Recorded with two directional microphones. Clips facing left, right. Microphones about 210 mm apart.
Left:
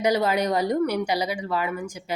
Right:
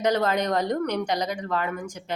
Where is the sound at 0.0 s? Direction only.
10° left (ahead or behind).